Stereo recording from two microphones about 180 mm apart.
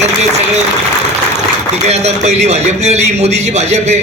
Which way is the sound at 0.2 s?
40° right (ahead or behind).